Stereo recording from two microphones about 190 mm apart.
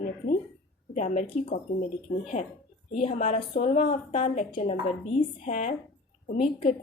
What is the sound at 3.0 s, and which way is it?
A woman's voice, 30° left (ahead or behind).